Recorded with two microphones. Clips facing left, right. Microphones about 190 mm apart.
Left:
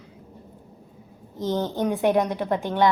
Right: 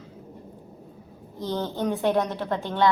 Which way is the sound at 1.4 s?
15° left (ahead or behind).